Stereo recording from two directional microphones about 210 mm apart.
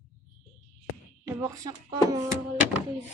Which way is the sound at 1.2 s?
15° right (ahead or behind).